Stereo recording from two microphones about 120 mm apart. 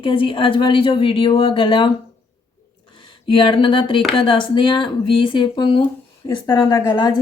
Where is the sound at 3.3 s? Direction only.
45° left (ahead or behind).